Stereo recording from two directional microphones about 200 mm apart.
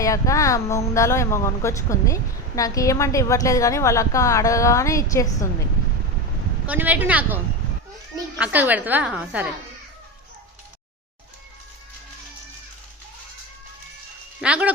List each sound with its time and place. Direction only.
0.0 s speech: 15° left (ahead or behind)
6.7 s a woman's voice: 10° right (ahead or behind)
14.4 s a woman's voice: 5° right (ahead or behind)